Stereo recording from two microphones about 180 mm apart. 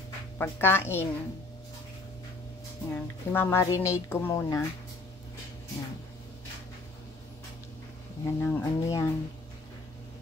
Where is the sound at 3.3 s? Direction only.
15° left (ahead or behind).